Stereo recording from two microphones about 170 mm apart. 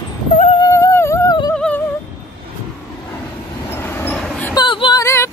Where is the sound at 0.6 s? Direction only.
20° left (ahead or behind).